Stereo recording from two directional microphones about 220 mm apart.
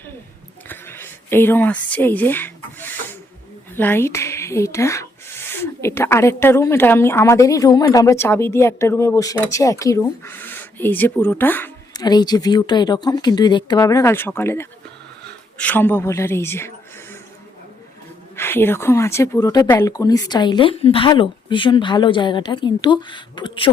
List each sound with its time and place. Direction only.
0.7 s a woman's voice: 10° left (ahead or behind)
18.3 s a woman's voice: 10° left (ahead or behind)